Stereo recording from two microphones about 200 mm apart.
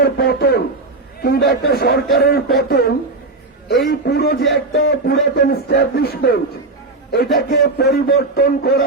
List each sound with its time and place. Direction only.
0.0 s a man's voice: 50° left (ahead or behind)